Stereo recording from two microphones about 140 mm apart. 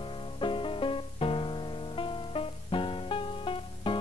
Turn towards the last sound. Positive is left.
turn(degrees=40)  # may be behind; listen again after turning